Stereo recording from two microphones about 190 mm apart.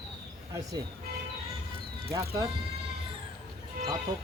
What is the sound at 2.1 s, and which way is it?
Speech, 15° right (ahead or behind).